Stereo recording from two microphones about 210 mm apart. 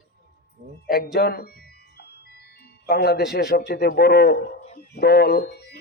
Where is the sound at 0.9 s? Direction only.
50° left (ahead or behind).